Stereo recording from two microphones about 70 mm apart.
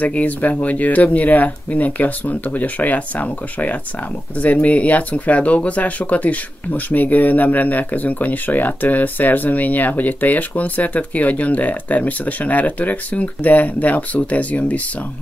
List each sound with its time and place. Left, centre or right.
0.0 s speech: left